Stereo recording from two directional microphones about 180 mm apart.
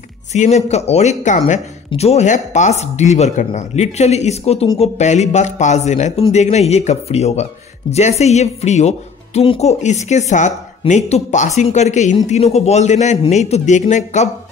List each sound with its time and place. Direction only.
0.3 s speech: 40° left (ahead or behind)